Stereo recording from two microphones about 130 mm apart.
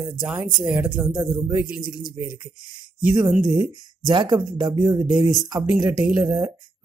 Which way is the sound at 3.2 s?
5° right (ahead or behind).